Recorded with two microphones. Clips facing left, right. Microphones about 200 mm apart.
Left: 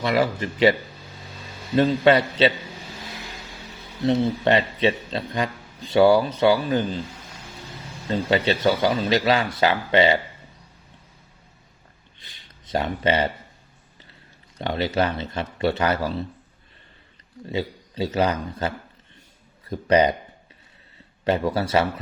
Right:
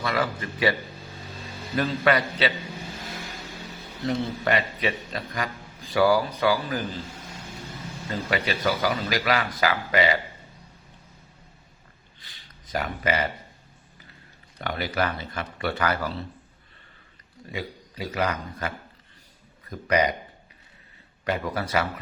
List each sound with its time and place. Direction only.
0.0 s a man's voice: 25° left (ahead or behind)
4.0 s a man's voice: 25° left (ahead or behind)
8.1 s a man's voice: 30° left (ahead or behind)
12.2 s a sound: 25° left (ahead or behind)
12.7 s a man's voice: 30° left (ahead or behind)
14.6 s a man's voice: 25° left (ahead or behind)
17.4 s a man's voice: 30° left (ahead or behind)
21.2 s a man's voice: 30° left (ahead or behind)